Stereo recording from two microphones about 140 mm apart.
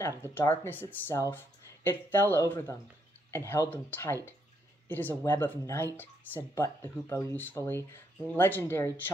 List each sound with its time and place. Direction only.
0.0 s speech: 15° left (ahead or behind)